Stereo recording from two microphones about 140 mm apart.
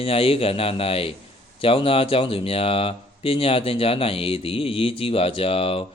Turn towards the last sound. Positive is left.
turn(degrees=45)  # may be behind; listen again after turning